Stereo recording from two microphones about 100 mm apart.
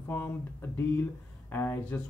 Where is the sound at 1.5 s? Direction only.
20° left (ahead or behind).